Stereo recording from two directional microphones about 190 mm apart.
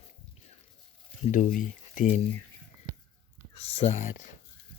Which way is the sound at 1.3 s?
45° left (ahead or behind).